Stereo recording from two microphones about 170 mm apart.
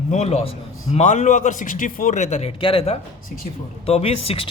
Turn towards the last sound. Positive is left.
turn(degrees=35)  # may be behind; listen again after turning